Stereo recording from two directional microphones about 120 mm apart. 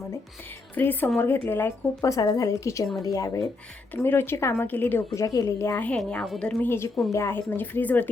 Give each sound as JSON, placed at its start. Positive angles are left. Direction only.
{"t": 0.8, "sound": "a woman's voice", "side_deg": 15}
{"t": 3.9, "sound": "a woman's voice", "side_deg": 15}
{"t": 5.9, "sound": "speech", "side_deg": 10}
{"t": 6.7, "sound": "a woman's voice", "side_deg": 20}